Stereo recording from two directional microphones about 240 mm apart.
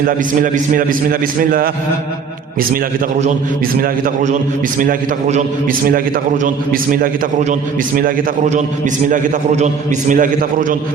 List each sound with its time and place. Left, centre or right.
0.4 s a man's voice: right
3.8 s a man's voice: right